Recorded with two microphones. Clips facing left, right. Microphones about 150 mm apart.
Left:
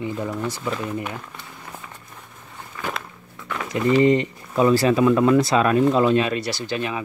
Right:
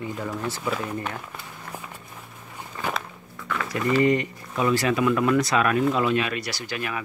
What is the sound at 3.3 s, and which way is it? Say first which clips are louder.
Speech: left 2 dB; 20° left (ahead or behind).